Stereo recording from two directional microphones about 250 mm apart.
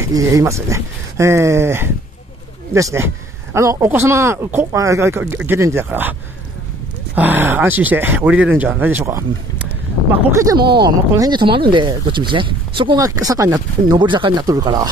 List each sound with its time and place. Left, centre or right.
0.0 s speech: centre
7.2 s speech: centre